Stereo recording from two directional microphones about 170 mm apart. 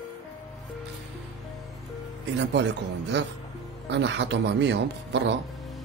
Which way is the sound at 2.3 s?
90° right.